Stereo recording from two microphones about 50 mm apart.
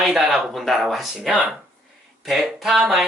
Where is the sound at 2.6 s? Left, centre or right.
Centre.